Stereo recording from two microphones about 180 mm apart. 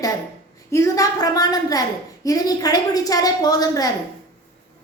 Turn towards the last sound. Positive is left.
turn(degrees=20)  # may be behind; listen again after turning